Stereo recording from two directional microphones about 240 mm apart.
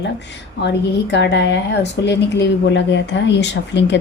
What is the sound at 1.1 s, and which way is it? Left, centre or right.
Speech, left.